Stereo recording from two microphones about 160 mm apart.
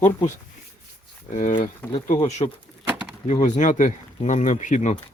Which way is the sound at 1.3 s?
50° left (ahead or behind).